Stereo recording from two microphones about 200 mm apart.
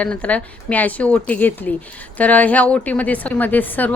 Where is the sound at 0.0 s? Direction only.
5° left (ahead or behind).